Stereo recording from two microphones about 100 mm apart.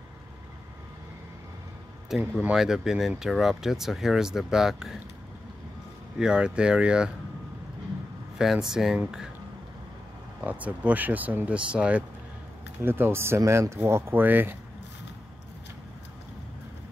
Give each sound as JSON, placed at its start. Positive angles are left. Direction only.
{"t": 2.0, "sound": "speech", "side_deg": 0}
{"t": 6.1, "sound": "speech", "side_deg": -10}
{"t": 8.4, "sound": "speech", "side_deg": -5}
{"t": 10.4, "sound": "speech", "side_deg": -15}
{"t": 12.8, "sound": "speech", "side_deg": -20}